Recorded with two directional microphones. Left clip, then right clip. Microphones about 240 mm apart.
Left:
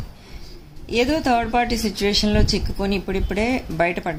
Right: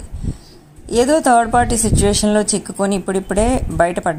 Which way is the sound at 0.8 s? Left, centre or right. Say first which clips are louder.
Right 6 dB; right.